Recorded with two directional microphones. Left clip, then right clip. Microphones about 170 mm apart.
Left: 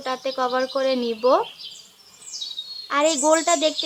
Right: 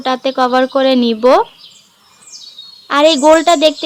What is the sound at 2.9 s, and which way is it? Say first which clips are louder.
Speech: right 10 dB; 50° right (ahead or behind).